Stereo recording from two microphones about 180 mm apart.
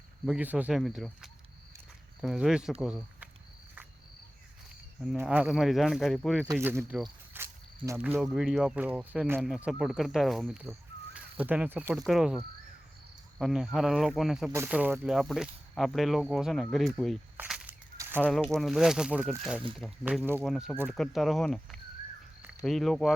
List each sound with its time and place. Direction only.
0.3 s speech: 5° right (ahead or behind)
4.9 s speech: 5° right (ahead or behind)
6.5 s speech: 15° right (ahead or behind)
7.0 s walk: 10° right (ahead or behind)
7.9 s speech: 10° right (ahead or behind)
10.7 s crow: 10° right (ahead or behind)
12.0 s speech: centre (ahead or behind)
14.5 s speech: 10° right (ahead or behind)
17.3 s a sound: 5° right (ahead or behind)
17.9 s a sound: 15° right (ahead or behind)
18.2 s speech: 5° left (ahead or behind)